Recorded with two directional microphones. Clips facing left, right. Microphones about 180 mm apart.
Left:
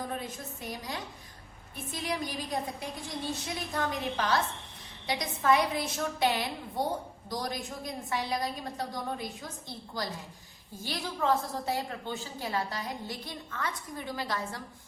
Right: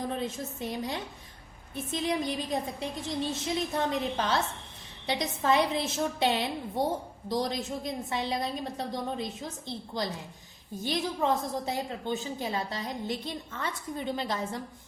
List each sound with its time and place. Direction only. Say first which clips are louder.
0.2 s a woman's voice: right 6 dB; 25° right (ahead or behind)